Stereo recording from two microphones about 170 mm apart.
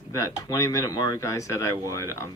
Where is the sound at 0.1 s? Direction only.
20° left (ahead or behind).